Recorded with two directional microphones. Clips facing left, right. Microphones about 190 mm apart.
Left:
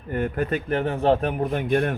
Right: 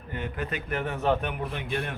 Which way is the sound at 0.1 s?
50° left (ahead or behind).